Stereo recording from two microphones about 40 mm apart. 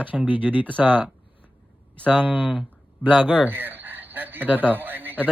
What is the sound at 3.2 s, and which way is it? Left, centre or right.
A man's voice, right.